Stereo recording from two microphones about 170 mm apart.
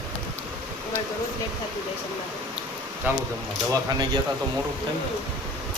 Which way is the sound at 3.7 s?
25° right (ahead or behind).